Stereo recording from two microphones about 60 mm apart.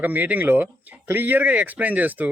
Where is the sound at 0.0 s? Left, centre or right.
Right.